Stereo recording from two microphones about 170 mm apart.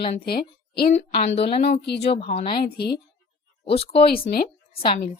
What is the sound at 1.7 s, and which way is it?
Speech, 80° left.